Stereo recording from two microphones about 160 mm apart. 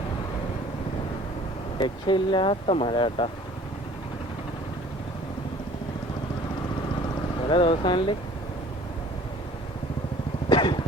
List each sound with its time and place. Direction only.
1.8 s speech: 30° left (ahead or behind)
7.4 s speech: 30° left (ahead or behind)
10.5 s vehicle: 30° left (ahead or behind)